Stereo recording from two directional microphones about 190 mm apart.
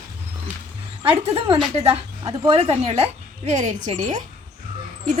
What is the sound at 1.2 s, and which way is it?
A woman's voice, 30° right (ahead or behind).